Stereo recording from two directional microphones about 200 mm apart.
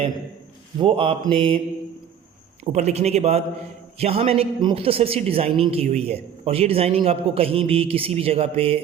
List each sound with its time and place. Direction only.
0.8 s a man's voice: 25° right (ahead or behind)
2.7 s a man's voice: 30° right (ahead or behind)